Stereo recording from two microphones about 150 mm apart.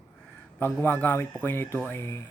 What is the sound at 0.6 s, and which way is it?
Speech, 15° left (ahead or behind).